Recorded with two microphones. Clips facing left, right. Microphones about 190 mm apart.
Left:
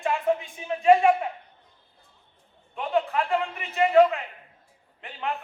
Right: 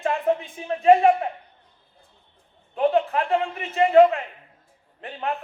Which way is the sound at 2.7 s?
35° right (ahead or behind).